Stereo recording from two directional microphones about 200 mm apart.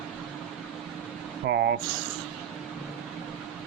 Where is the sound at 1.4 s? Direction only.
55° right (ahead or behind).